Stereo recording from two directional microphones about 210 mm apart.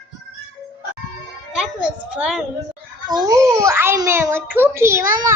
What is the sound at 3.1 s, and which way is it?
A child's voice, 15° right (ahead or behind).